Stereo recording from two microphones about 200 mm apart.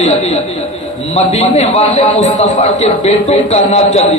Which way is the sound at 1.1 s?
30° left (ahead or behind).